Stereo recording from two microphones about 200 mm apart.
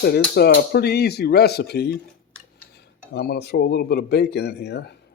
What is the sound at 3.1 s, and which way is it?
Speech, 50° left (ahead or behind).